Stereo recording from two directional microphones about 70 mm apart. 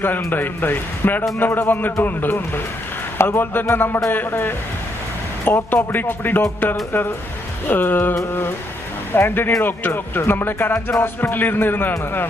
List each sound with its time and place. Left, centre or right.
0.3 s a man's voice: left
7.7 s a man's voice: left